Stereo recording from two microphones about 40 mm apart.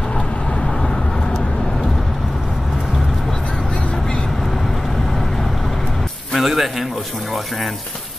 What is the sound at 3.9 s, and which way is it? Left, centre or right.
Vehicle, centre.